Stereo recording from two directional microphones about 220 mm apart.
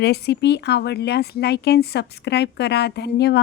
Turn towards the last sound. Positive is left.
turn(degrees=50)  # may be behind; listen again after turning